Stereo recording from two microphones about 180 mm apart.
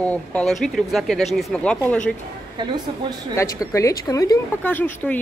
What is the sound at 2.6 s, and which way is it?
Speech, 25° right (ahead or behind).